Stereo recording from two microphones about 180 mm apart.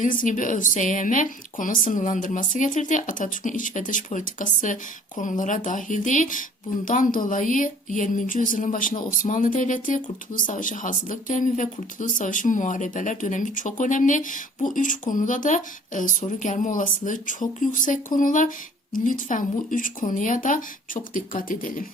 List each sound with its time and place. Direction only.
0.0 s speech: 45° left (ahead or behind)